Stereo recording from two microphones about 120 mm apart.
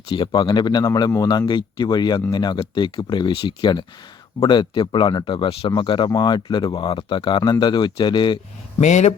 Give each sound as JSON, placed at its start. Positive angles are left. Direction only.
{"t": 0.1, "sound": "speech", "side_deg": 40}
{"t": 8.8, "sound": "speech", "side_deg": 75}